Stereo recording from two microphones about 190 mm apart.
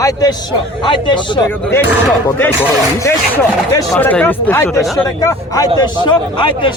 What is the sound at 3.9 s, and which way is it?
Speech, 5° left (ahead or behind).